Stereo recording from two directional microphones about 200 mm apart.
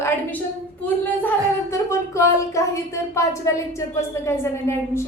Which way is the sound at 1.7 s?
15° left (ahead or behind).